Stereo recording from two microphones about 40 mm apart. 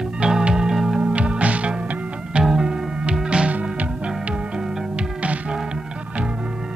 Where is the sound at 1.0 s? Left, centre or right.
Right.